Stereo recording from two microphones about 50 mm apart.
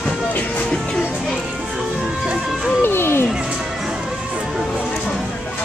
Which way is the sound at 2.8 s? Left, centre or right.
Left.